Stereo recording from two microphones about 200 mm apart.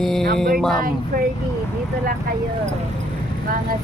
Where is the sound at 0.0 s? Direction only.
Centre (ahead or behind).